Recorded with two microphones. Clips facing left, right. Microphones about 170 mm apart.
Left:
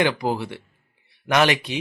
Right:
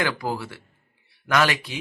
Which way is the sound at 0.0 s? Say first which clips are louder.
Left 4 dB; 20° left (ahead or behind).